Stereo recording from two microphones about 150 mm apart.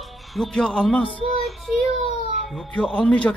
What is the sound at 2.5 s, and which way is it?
Speech, 5° left (ahead or behind).